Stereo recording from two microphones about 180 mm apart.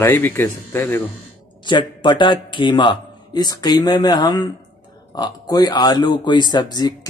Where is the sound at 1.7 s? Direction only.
25° left (ahead or behind).